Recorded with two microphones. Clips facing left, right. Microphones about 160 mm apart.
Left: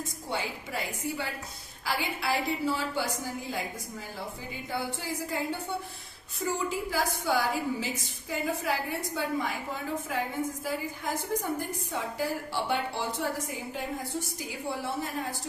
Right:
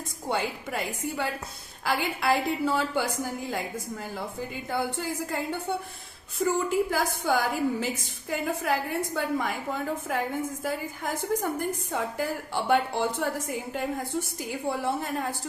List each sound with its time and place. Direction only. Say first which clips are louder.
0.3 s a woman's voice: right 6 dB; 55° right (ahead or behind)
4.7 s a woman's voice: right 4 dB; 55° right (ahead or behind)
14.7 s a woman's voice: right 4 dB; 55° right (ahead or behind)